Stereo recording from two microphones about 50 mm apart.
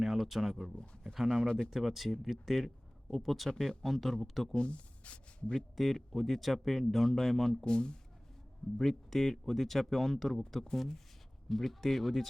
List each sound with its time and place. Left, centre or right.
0.0 s speech: centre
1.5 s speech: centre
1.7 s speech: centre
3.5 s speech: centre
3.8 s speech: centre
4.5 s speech: left
5.7 s speech: centre
7.6 s speech: centre
8.8 s speech: centre